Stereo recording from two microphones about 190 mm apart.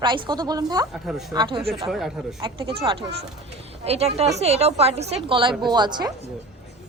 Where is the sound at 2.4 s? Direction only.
25° right (ahead or behind).